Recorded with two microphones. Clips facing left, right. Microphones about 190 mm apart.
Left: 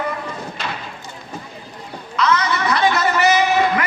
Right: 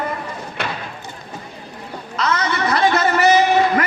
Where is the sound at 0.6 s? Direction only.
60° right (ahead or behind).